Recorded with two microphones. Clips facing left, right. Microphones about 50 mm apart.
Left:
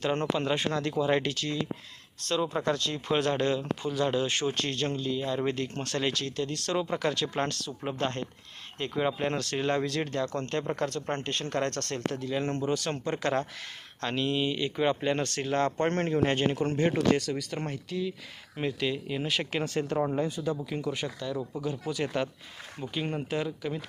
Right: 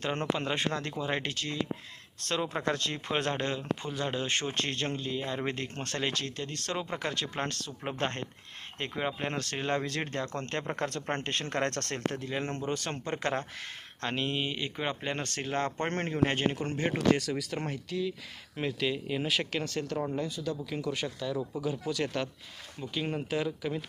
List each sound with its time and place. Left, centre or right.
0.3 s speech: right
2.2 s speech: right
3.1 s speech: right
7.9 s speech: right
8.8 s speech: right
16.9 s speech: centre
19.5 s speech: centre
20.8 s speech: centre
21.8 s speech: centre